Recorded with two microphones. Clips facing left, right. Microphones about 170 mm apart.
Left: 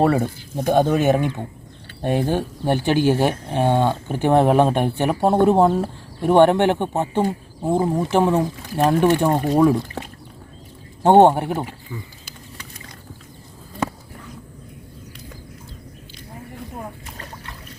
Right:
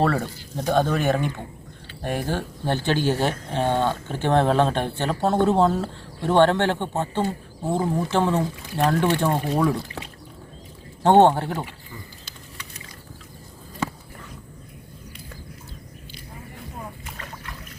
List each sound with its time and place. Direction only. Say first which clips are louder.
0.0 s speech: left 4 dB; 15° left (ahead or behind)
11.0 s speech: left 3 dB; 15° left (ahead or behind)